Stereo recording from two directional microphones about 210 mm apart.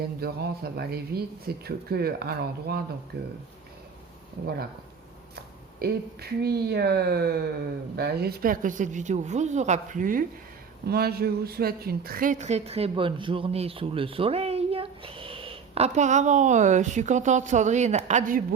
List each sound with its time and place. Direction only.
0.2 s speech: 50° right (ahead or behind)
5.8 s a woman's voice: 50° right (ahead or behind)